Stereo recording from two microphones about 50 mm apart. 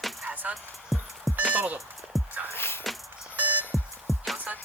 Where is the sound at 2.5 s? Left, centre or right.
Left.